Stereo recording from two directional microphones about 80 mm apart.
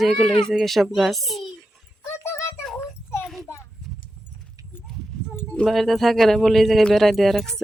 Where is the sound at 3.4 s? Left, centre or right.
Left.